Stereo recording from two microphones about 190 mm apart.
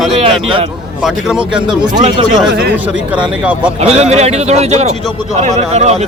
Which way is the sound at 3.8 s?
35° right (ahead or behind).